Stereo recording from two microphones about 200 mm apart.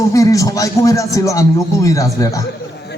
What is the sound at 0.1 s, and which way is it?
Speech, 15° left (ahead or behind).